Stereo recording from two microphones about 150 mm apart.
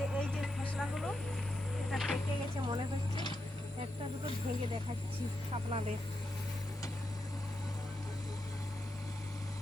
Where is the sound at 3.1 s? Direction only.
30° left (ahead or behind).